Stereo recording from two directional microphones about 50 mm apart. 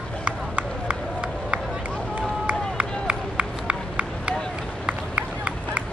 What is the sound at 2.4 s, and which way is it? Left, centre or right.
Run, right.